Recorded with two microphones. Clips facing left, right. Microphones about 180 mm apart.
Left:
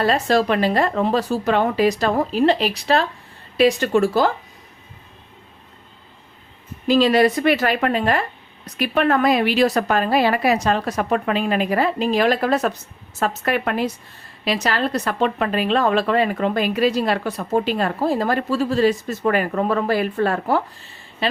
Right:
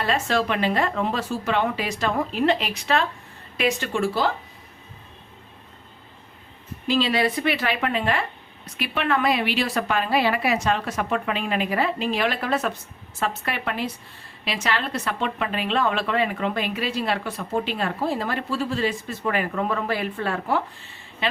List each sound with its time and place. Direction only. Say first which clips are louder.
0.0 s speech: left 5 dB; 40° left (ahead or behind)
6.8 s a woman's voice: left 7 dB; 45° left (ahead or behind)